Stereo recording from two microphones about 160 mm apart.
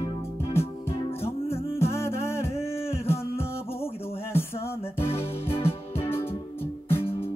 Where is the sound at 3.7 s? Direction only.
40° left (ahead or behind).